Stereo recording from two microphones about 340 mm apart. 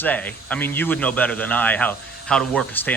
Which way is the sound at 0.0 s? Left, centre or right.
Centre.